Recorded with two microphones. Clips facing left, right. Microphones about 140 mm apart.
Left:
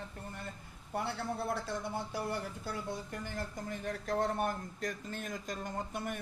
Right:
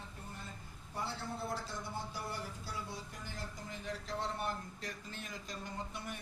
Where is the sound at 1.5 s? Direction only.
60° left (ahead or behind).